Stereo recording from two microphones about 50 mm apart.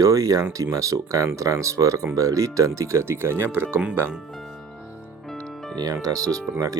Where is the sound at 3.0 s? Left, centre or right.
Right.